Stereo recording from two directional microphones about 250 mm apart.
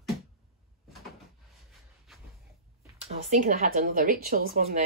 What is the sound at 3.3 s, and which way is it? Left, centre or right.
A woman's voice, right.